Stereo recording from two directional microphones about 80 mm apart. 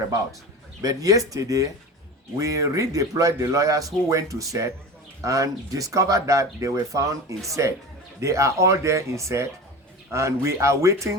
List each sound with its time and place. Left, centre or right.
0.8 s speech: right